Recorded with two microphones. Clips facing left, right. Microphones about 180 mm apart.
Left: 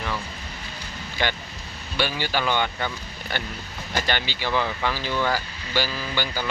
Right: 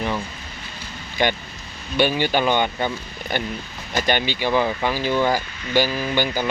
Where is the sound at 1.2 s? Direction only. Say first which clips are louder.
Right 6 dB; 15° right (ahead or behind).